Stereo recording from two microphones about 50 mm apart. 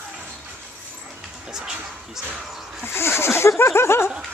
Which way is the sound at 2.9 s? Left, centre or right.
Left.